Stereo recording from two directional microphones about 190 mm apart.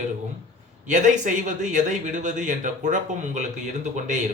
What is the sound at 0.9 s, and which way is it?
A man's voice, 40° right (ahead or behind).